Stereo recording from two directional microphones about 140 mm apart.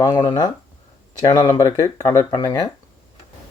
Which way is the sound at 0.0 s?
30° left (ahead or behind).